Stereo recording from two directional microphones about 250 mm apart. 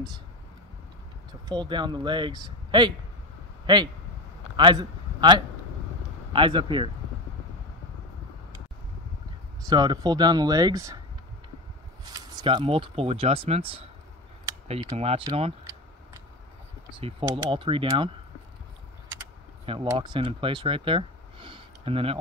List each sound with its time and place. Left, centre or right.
1.5 s a man's voice: centre
9.7 s speech: centre
12.0 s speech: centre
16.9 s speech: centre
19.6 s speech: right